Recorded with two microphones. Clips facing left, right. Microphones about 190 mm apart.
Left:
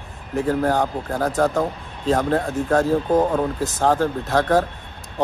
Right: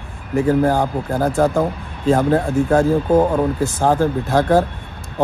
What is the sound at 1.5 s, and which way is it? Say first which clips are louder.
Speech: right 3 dB; 5° right (ahead or behind).